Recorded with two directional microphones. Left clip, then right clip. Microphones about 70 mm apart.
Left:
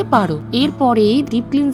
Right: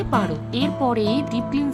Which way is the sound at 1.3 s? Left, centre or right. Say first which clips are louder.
Left 6 dB; left.